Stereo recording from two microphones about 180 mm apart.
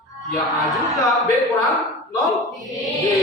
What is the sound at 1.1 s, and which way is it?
Speech, centre (ahead or behind).